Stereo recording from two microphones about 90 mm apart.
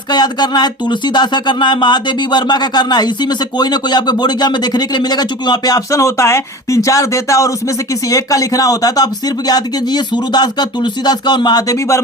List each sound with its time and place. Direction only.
0.1 s speech: 50° left (ahead or behind)